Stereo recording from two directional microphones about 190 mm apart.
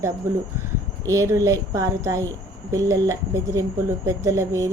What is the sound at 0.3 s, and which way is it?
Speech, 15° right (ahead or behind).